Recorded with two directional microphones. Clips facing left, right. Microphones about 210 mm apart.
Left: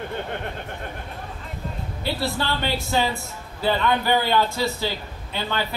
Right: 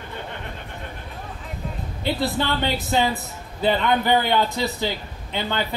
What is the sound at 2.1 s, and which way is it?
A man's voice, 20° right (ahead or behind).